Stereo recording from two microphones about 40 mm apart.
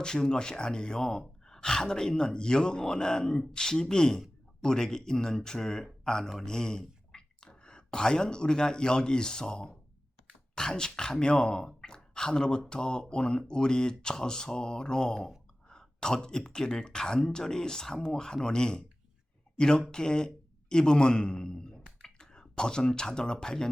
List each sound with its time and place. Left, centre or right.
0.0 s speech: centre